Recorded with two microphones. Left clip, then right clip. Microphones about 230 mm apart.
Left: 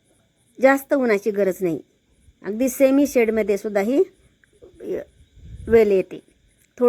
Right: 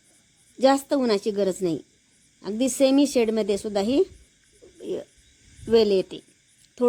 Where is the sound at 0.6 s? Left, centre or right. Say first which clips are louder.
Left 3 dB; centre.